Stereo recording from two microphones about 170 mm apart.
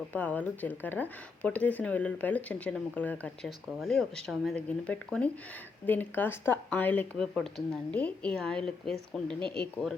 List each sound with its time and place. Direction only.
0.1 s speech: 10° left (ahead or behind)